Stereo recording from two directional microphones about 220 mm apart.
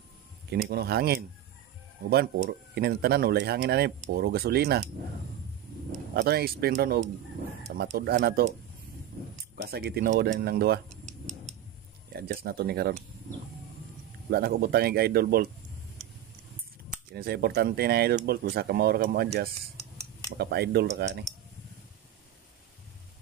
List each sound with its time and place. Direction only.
0.5 s speech: 45° right (ahead or behind)
6.1 s speech: 45° right (ahead or behind)
8.1 s speech: 45° right (ahead or behind)
9.7 s speech: 45° right (ahead or behind)
11.1 s tick-tock: 30° right (ahead or behind)
12.1 s speech: 45° right (ahead or behind)
14.3 s speech: 45° right (ahead or behind)
17.1 s speech: 45° right (ahead or behind)